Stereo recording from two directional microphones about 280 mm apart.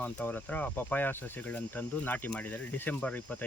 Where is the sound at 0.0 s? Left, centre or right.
Centre.